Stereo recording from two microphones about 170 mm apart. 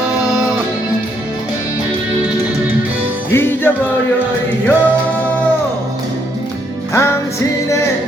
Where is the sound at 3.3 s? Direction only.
15° left (ahead or behind).